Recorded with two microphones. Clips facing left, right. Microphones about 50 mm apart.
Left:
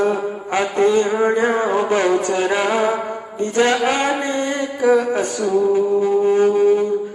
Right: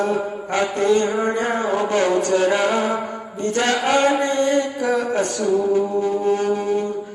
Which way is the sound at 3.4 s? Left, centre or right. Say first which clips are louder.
Left 3 dB; left.